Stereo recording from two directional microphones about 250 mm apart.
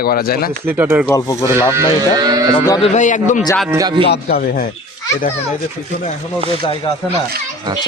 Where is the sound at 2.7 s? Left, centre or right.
Left.